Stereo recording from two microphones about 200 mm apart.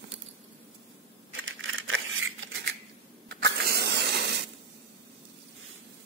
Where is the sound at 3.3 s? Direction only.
55° right (ahead or behind).